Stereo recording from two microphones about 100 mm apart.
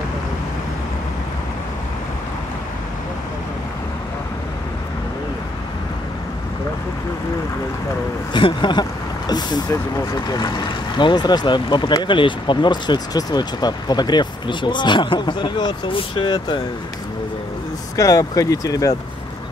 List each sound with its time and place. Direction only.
8.3 s speech: 55° left (ahead or behind)
17.9 s speech: 35° left (ahead or behind)